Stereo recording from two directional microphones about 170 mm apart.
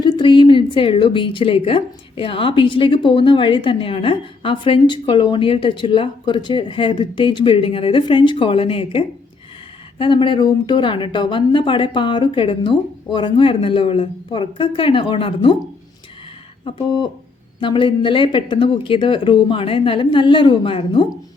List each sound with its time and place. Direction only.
0.0 s a woman's voice: 25° left (ahead or behind)
16.7 s a woman's voice: 25° left (ahead or behind)